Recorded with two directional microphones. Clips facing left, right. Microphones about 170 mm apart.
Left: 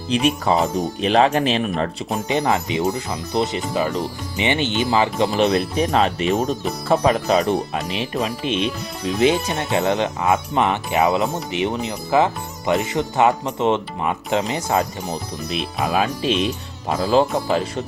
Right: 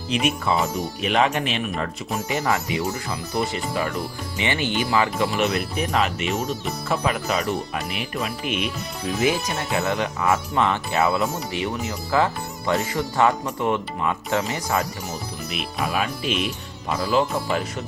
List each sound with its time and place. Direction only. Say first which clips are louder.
0.1 s speech: left 4 dB; 35° left (ahead or behind)
15.4 s speech: left 4 dB; 35° left (ahead or behind)